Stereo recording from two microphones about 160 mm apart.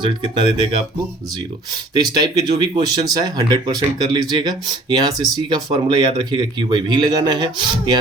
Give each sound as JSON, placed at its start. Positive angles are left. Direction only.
{"t": 0.0, "sound": "speech", "side_deg": -30}
{"t": 1.9, "sound": "speech", "side_deg": -25}